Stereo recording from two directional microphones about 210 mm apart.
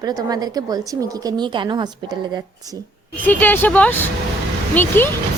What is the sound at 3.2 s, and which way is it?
Speech, 10° left (ahead or behind).